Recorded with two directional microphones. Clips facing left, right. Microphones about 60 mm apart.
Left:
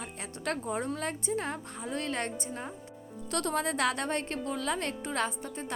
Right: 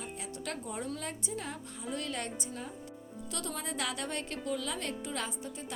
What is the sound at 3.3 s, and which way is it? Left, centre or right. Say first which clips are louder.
A woman's voice: left 9 dB; left.